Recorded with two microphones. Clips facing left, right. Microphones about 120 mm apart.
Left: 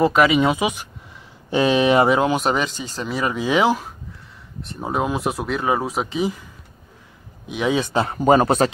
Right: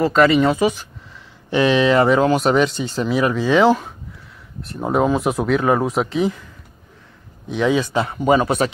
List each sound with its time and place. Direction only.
0.1 s speech: 10° left (ahead or behind)
1.5 s speech: 25° left (ahead or behind)
2.0 s speech: 10° left (ahead or behind)
3.3 s speech: 10° left (ahead or behind)
7.4 s speech: 15° left (ahead or behind)
7.7 s speech: 30° left (ahead or behind)